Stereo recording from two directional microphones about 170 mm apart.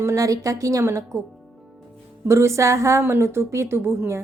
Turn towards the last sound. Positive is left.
turn(degrees=-15)  # may be behind; listen again after turning